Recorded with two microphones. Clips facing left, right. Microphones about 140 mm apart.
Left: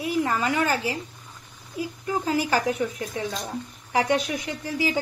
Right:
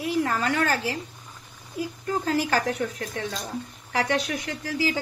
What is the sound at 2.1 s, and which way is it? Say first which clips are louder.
A woman's voice: left 1 dB; 15° left (ahead or behind).